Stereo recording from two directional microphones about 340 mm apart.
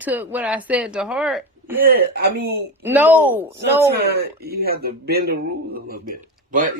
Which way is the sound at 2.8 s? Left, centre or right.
Centre.